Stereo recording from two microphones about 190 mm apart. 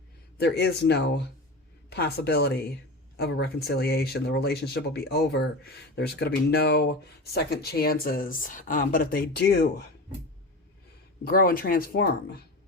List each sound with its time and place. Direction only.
0.3 s speech: 60° left (ahead or behind)
11.3 s speech: 50° left (ahead or behind)